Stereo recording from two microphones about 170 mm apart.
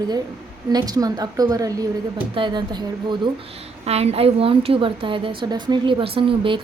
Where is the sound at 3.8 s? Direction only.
35° right (ahead or behind).